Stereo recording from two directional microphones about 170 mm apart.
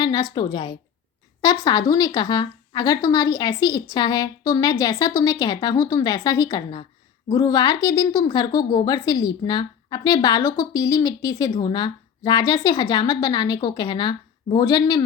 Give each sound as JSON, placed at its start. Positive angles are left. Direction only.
{"t": 0.0, "sound": "a woman's voice", "side_deg": 25}